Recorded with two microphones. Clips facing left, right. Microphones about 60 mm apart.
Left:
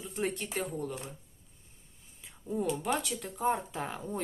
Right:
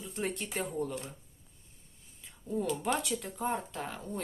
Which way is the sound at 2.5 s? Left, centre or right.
Centre.